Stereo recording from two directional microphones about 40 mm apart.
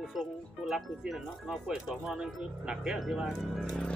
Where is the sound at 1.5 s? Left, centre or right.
Right.